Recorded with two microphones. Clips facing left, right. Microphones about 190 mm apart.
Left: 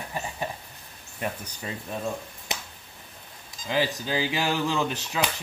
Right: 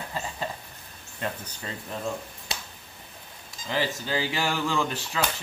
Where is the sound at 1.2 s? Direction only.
15° left (ahead or behind).